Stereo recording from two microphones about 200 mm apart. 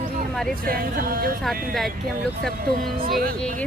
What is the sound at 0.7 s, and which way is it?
Speech, 45° right (ahead or behind).